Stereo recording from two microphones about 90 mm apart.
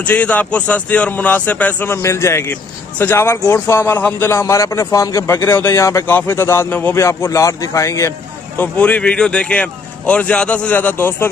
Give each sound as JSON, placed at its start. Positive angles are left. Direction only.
{"t": 0.0, "sound": "speech", "side_deg": 15}
{"t": 2.0, "sound": "a man's voice", "side_deg": 30}
{"t": 7.0, "sound": "a man's voice", "side_deg": 30}
{"t": 8.5, "sound": "speech", "side_deg": 15}